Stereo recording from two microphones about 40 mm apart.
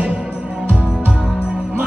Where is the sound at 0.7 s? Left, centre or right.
Right.